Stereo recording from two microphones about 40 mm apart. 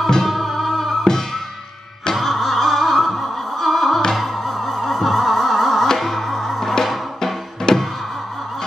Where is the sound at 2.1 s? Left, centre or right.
Centre.